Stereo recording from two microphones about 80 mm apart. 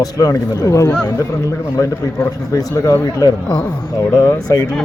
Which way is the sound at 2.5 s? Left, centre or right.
Left.